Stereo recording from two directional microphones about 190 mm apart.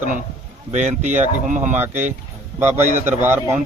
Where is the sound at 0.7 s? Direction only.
40° right (ahead or behind).